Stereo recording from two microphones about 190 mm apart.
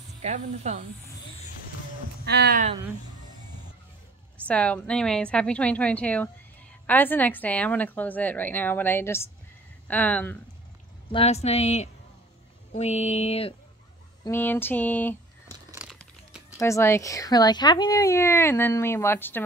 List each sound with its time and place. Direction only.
0.2 s speech: 40° right (ahead or behind)
2.2 s speech: 60° right (ahead or behind)
4.5 s speech: 5° left (ahead or behind)
11.1 s speech: 30° left (ahead or behind)
14.2 s speech: 10° left (ahead or behind)
15.8 s crumpling: 5° right (ahead or behind)
16.5 s speech: 15° left (ahead or behind)